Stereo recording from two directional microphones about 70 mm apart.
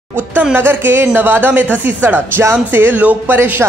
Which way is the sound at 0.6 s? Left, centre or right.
Right.